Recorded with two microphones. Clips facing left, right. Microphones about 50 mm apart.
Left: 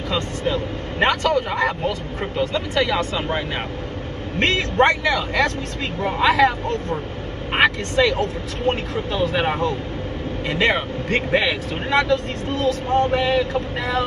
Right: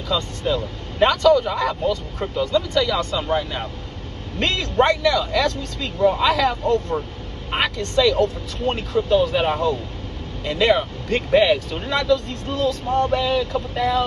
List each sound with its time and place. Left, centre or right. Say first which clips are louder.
0.1 s speech: right 1 dB; left
4.4 s speech: left 2 dB; left